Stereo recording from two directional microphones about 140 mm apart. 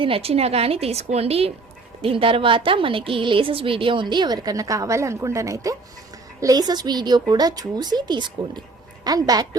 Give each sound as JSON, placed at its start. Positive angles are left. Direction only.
{"t": 0.0, "sound": "a woman's voice", "side_deg": -45}